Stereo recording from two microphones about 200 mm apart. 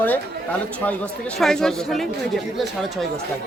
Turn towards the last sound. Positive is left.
turn(degrees=0)  # may be behind; listen again after turning